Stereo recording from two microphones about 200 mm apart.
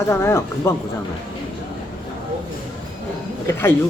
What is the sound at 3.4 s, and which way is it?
Speech, 10° left (ahead or behind).